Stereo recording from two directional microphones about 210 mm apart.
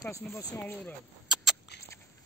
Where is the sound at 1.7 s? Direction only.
50° left (ahead or behind).